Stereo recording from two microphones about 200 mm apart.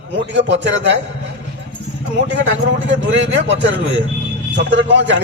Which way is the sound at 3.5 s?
65° right (ahead or behind).